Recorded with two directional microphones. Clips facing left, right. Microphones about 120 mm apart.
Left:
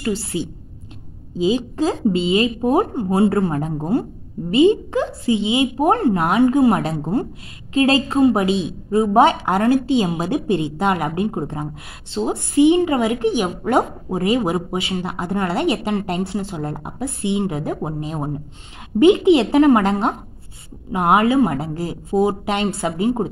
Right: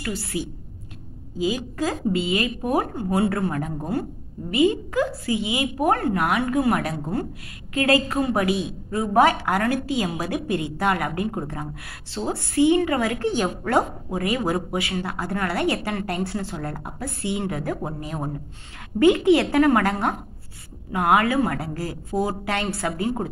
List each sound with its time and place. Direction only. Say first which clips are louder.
0.0 s a woman's voice: left 6 dB; 25° left (ahead or behind)